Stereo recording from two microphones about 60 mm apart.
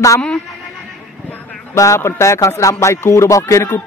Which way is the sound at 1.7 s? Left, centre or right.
Left.